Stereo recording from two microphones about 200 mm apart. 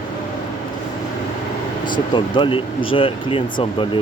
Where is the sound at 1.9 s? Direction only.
25° left (ahead or behind).